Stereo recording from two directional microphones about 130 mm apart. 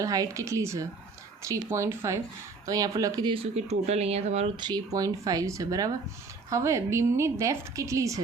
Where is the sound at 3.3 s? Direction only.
55° right (ahead or behind).